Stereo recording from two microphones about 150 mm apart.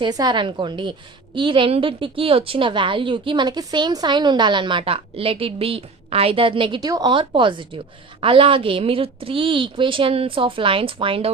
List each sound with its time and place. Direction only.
0.0 s a woman's voice: 30° right (ahead or behind)